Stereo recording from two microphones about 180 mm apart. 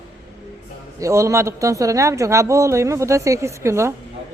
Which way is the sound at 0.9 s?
15° right (ahead or behind).